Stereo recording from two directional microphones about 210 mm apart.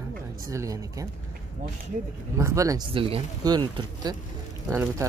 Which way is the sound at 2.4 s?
15° right (ahead or behind).